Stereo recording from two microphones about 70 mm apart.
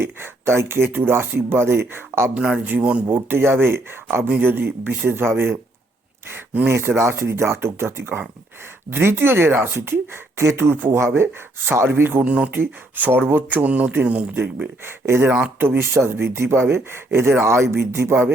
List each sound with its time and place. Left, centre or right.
0.0 s speech: right
2.3 s speech: centre
3.2 s speech: right
6.7 s speech: right
12.2 s speech: centre
12.5 s speech: right
15.0 s speech: right
15.3 s speech: centre
15.5 s speech: right